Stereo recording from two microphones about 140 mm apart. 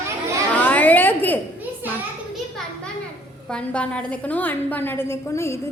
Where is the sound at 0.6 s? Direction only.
10° left (ahead or behind).